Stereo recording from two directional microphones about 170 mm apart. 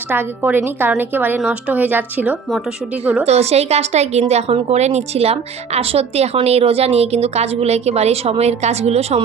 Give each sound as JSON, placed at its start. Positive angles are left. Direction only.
{"t": 0.1, "sound": "a woman's voice", "side_deg": -10}
{"t": 3.2, "sound": "a woman's voice", "side_deg": -40}